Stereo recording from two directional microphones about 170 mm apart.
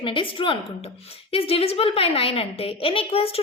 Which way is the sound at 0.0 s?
30° left (ahead or behind).